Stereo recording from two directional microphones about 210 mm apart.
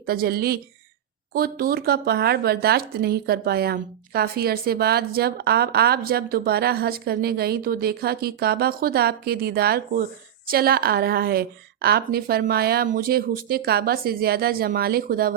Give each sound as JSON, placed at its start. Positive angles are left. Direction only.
{"t": 0.0, "sound": "speech", "side_deg": -45}